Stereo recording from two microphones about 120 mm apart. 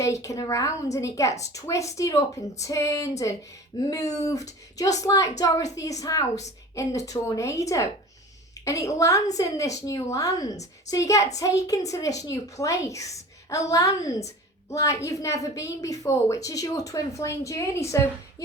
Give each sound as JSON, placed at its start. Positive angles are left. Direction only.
{"t": 0.0, "sound": "a woman's voice", "side_deg": 25}